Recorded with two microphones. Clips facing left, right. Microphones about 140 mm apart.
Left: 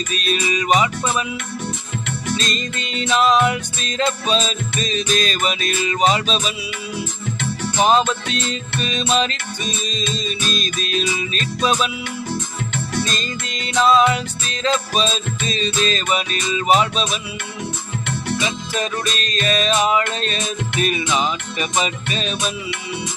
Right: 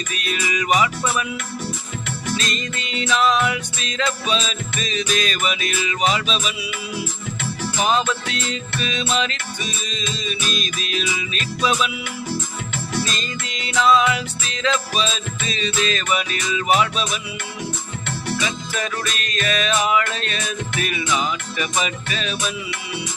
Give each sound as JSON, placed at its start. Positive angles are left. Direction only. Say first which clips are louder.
{"t": 0.1, "sound": "music", "louder": "left 4 dB", "side_deg": 25}
{"t": 2.4, "sound": "music", "louder": "left 2 dB", "side_deg": 35}
{"t": 7.8, "sound": "music", "louder": "left 4 dB", "side_deg": 30}
{"t": 13.1, "sound": "music", "louder": "left 2 dB", "side_deg": 35}
{"t": 18.3, "sound": "music", "louder": "left 3 dB", "side_deg": 25}